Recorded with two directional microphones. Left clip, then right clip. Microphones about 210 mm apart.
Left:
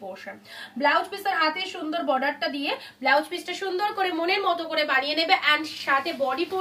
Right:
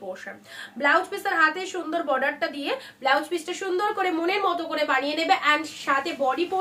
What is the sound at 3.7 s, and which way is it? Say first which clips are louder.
A woman's voice: right 1 dB; 20° right (ahead or behind).